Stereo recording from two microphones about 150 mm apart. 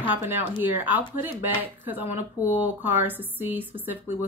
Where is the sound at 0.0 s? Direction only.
10° right (ahead or behind).